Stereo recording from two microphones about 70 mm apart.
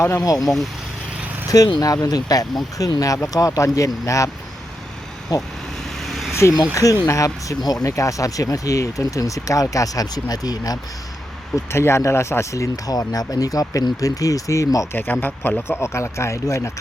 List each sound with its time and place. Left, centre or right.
0.2 s speech: left
0.4 s speech: centre
1.5 s speech: left
5.3 s speech: left
6.0 s vehicle: centre
6.8 s speech: left
7.9 s speech: left
11.5 s speech: left
14.9 s speech: left